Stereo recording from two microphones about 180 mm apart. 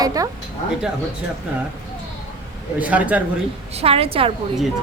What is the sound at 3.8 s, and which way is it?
Speech, 35° right (ahead or behind).